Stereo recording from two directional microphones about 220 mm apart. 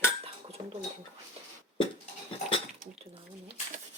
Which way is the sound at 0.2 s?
25° right (ahead or behind).